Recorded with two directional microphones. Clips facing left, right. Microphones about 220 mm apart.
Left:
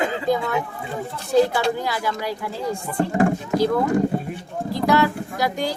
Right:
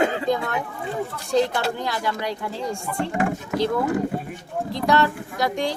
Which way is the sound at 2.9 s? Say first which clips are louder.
Left 6 dB; 35° left (ahead or behind).